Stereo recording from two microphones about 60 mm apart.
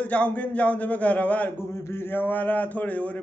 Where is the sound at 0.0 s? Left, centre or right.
Left.